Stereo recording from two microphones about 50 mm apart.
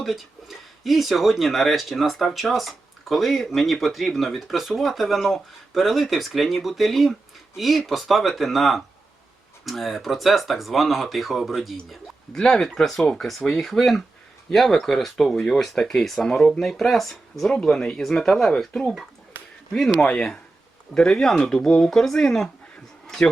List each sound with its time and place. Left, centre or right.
0.0 s speech: centre
12.4 s speech: centre
17.7 s speech: centre
19.9 s speech: centre